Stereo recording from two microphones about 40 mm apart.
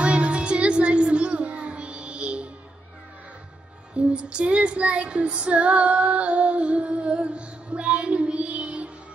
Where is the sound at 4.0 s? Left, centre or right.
Right.